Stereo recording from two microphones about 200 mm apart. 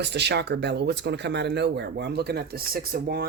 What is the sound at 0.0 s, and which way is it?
Speech, 55° right (ahead or behind).